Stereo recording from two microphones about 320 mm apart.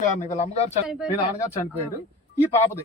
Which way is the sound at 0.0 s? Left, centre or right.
Left.